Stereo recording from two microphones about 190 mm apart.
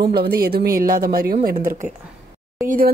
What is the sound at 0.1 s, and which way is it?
Speech, 55° right (ahead or behind).